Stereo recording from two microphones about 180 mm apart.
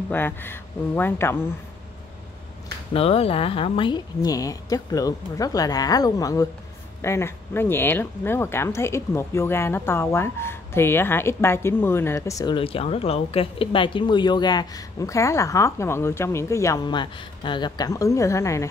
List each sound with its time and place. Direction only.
0.1 s speech: 10° left (ahead or behind)
2.9 s a woman's voice: 30° left (ahead or behind); by 18.7 s 15° left (ahead or behind)